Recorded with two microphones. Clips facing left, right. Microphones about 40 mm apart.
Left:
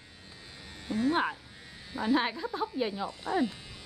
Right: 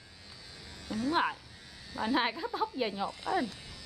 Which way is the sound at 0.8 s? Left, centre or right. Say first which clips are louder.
Left 5 dB; left.